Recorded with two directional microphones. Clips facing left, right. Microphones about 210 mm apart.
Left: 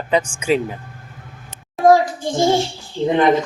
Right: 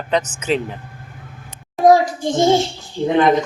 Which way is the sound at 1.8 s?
20° right (ahead or behind).